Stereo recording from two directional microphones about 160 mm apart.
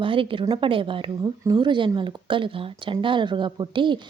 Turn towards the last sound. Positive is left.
turn(degrees=-30)  # may be behind; listen again after turning